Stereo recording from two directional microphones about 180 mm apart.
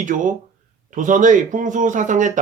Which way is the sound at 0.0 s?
45° right (ahead or behind).